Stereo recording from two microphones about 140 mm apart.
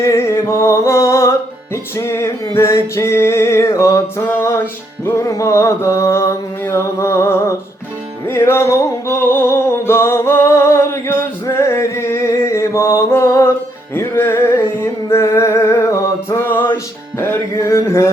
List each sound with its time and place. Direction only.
0.0 s music: 20° left (ahead or behind)